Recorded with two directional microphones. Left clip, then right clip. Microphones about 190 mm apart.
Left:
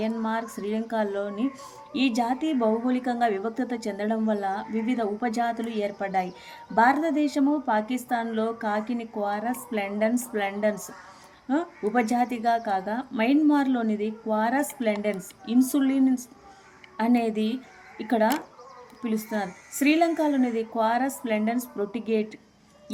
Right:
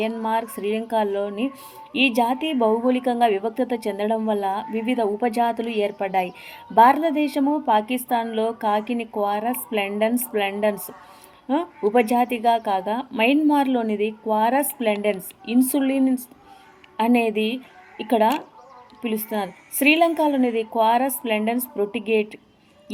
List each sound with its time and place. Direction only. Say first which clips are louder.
0.0 s speech: right 5 dB; 15° right (ahead or behind)